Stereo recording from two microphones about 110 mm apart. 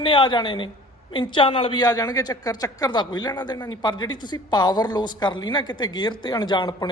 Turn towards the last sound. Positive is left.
turn(degrees=45)  # may be behind; listen again after turning